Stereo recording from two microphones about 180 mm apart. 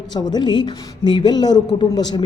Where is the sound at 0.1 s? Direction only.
25° left (ahead or behind).